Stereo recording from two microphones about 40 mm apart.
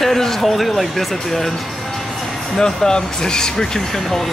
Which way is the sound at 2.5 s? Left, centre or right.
Centre.